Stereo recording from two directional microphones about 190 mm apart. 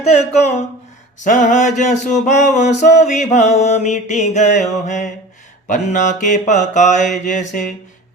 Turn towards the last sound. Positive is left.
turn(degrees=40)  # may be behind; listen again after turning